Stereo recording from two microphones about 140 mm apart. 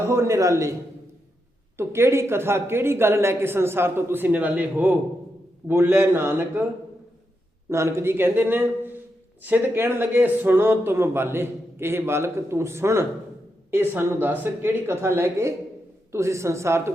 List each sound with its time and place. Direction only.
0.1 s speech: 20° right (ahead or behind)
7.7 s speech: 20° right (ahead or behind)